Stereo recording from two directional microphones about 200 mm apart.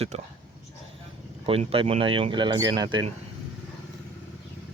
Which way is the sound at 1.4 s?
30° right (ahead or behind).